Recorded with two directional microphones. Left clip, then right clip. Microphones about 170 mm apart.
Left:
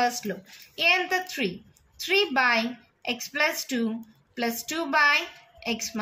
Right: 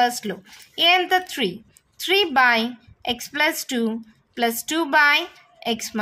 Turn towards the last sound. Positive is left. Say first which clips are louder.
# right 5 dB
turn(degrees=-50)  # may be behind; listen again after turning